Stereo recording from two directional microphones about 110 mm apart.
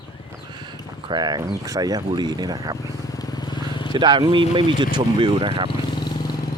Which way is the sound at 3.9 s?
45° right (ahead or behind).